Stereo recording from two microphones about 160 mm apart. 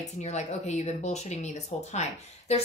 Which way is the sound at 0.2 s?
45° left (ahead or behind).